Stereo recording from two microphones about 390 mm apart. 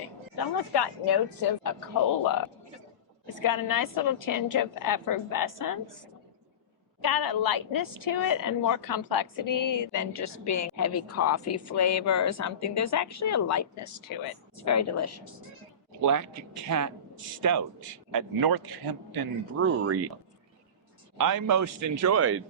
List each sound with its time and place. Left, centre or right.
0.3 s speech: left
3.4 s a woman's voice: left
7.0 s a woman's voice: left
16.0 s a man's voice: right
18.1 s speech: right
19.5 s speech: right
21.2 s a man's voice: right